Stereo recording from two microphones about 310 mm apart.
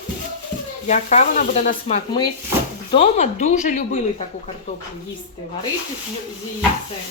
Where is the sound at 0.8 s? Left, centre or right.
Left.